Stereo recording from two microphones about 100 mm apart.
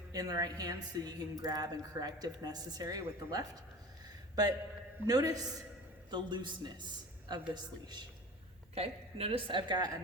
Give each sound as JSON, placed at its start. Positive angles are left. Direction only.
{"t": 0.1, "sound": "a woman's voice", "side_deg": -40}
{"t": 5.0, "sound": "a woman's voice", "side_deg": -40}
{"t": 6.1, "sound": "speech", "side_deg": -50}
{"t": 8.7, "sound": "a woman's voice", "side_deg": -85}